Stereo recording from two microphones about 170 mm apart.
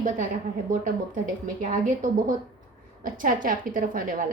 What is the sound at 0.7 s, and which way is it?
A woman's voice, 50° right (ahead or behind).